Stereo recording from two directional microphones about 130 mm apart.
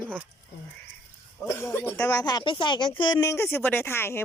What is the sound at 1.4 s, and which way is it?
Speech, 20° left (ahead or behind).